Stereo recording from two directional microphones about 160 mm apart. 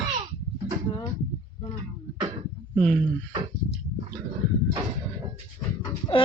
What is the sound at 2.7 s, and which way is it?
Speech, 5° left (ahead or behind).